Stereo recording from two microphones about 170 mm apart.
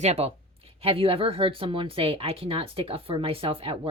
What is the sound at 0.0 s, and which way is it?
Speech, 40° right (ahead or behind).